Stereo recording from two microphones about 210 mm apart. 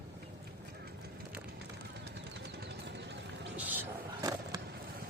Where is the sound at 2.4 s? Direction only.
50° right (ahead or behind).